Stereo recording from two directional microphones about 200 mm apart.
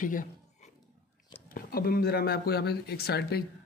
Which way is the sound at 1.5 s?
50° left (ahead or behind).